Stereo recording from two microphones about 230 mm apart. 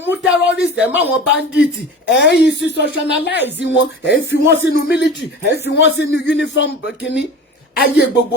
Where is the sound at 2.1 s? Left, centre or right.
Left.